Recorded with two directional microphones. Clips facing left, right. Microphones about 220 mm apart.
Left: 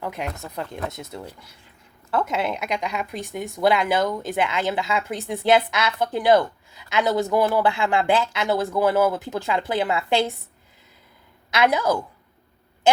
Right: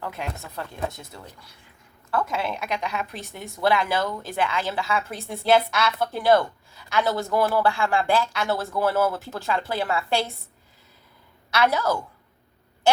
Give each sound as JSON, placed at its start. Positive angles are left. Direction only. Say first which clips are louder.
{"t": 0.0, "sound": "speech", "louder": "left 3 dB", "side_deg": 15}
{"t": 11.5, "sound": "speech", "louder": "left 2 dB", "side_deg": 15}